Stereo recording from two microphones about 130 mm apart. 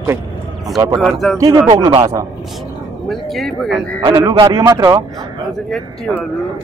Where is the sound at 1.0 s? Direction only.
Centre (ahead or behind).